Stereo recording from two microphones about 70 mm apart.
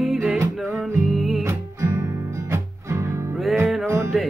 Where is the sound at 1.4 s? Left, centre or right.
Right.